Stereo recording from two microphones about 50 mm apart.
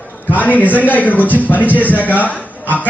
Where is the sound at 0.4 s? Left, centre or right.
Left.